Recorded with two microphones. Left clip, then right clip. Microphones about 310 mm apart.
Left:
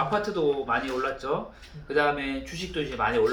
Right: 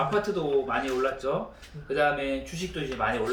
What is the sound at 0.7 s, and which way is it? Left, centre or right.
Speech, centre.